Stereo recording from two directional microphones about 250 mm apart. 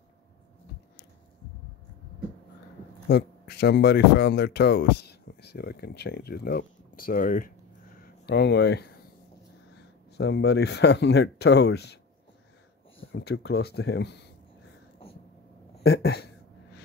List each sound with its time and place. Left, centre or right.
3.1 s speech: left
10.1 s speech: left
13.0 s speech: left
15.8 s speech: left